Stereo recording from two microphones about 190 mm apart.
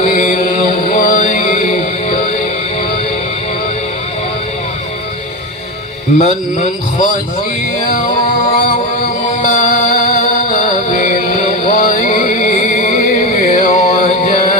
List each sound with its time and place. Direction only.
0.0 s chant: 40° left (ahead or behind)
6.1 s a man's voice: 40° left (ahead or behind)
7.8 s music: 45° left (ahead or behind)
9.4 s music: 40° left (ahead or behind)